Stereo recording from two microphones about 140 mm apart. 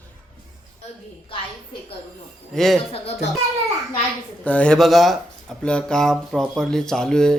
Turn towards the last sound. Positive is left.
turn(degrees=5)  # may be behind; listen again after turning